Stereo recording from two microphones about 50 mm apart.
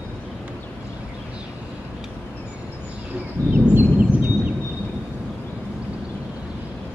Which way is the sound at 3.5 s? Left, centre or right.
Right.